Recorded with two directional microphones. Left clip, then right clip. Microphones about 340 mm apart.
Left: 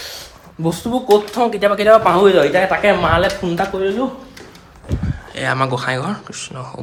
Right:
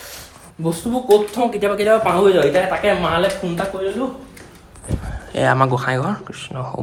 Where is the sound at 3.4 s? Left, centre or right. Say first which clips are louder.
Left 4 dB; left.